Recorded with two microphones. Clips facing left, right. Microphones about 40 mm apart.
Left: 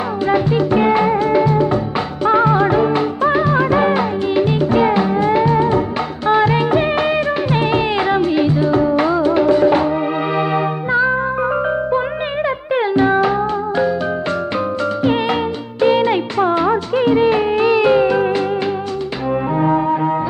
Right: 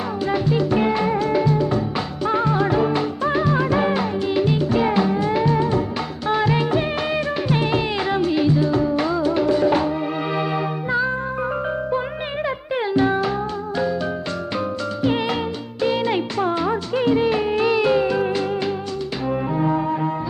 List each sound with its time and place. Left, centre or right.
0.3 s music: left
12.7 s music: left
15.0 s music: left